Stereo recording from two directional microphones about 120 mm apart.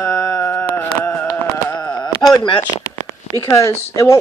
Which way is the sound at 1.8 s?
35° left (ahead or behind).